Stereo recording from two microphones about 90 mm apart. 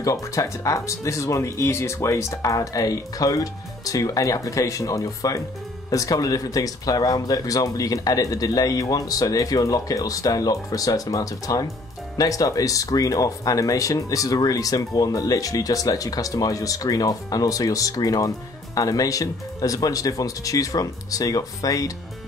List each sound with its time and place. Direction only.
0.0 s speech: 35° left (ahead or behind)